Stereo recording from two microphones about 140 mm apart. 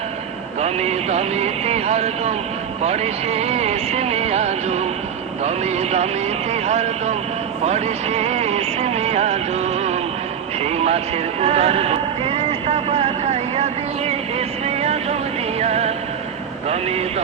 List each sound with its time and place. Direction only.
0.6 s speech: 50° right (ahead or behind)
7.6 s vehicle: 50° right (ahead or behind)
10.6 s speech: 45° right (ahead or behind)
14.3 s vehicle: 50° right (ahead or behind)
15.6 s music: 50° right (ahead or behind)